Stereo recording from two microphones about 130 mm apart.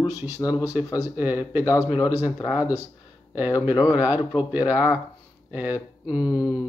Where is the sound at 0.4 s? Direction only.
25° left (ahead or behind).